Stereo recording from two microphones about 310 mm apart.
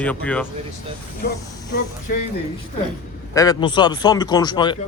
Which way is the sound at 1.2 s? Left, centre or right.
Left.